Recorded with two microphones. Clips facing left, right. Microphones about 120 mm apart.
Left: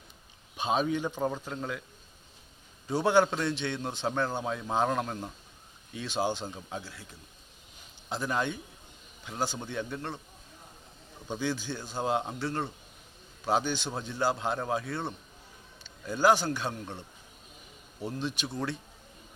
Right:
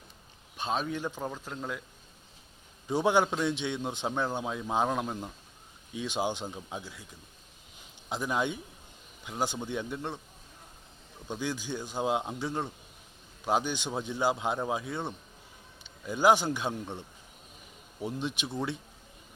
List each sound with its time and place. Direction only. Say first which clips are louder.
0.5 s speech: left 4 dB; 5° left (ahead or behind)
2.9 s a man's voice: left 1 dB; 15° right (ahead or behind)
8.1 s a man's voice: even; 15° right (ahead or behind)
11.3 s a man's voice: left 1 dB; 10° right (ahead or behind)
12.0 s a man's voice: left 1 dB; 5° right (ahead or behind)
18.0 s a man's voice: even; 15° right (ahead or behind)